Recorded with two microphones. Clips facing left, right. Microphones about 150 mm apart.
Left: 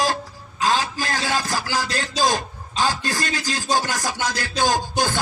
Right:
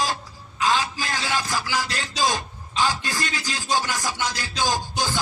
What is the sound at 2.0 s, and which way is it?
A man's voice, 45° left (ahead or behind).